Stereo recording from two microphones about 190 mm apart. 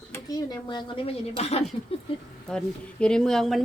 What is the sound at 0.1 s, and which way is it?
Speech, 20° left (ahead or behind).